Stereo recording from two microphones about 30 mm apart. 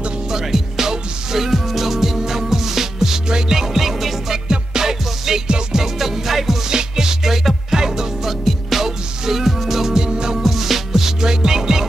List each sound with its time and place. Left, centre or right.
0.3 s music: centre
4.5 s music: centre
5.9 s music: centre
6.7 s music: right
8.3 s music: centre
9.9 s music: right
10.4 s music: centre